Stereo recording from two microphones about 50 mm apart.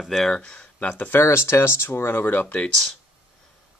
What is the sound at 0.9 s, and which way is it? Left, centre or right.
Speech, left.